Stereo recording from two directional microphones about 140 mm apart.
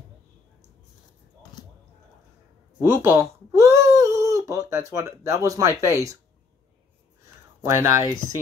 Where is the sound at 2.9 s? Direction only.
15° right (ahead or behind).